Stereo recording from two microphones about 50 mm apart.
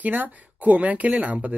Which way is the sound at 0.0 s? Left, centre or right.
Right.